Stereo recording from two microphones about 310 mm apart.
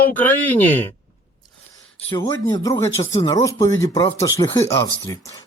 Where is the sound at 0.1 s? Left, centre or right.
Centre.